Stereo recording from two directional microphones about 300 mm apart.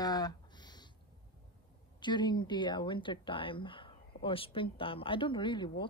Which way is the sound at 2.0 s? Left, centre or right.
Centre.